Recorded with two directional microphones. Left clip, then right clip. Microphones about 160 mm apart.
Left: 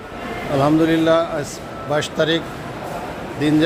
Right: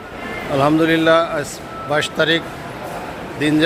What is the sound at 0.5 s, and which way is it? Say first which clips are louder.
A man's voice: right 1 dB; 15° left (ahead or behind).